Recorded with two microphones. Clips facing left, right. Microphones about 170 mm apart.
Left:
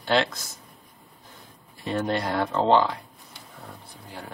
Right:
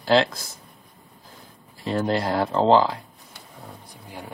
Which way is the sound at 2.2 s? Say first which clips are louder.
Right 3 dB; 30° right (ahead or behind).